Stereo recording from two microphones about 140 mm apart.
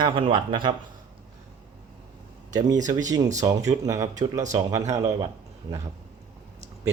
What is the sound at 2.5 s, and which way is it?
Speech, 25° right (ahead or behind).